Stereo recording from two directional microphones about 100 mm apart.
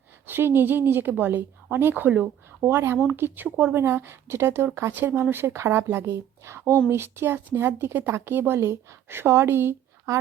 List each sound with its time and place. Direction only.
0.3 s speech: 20° right (ahead or behind)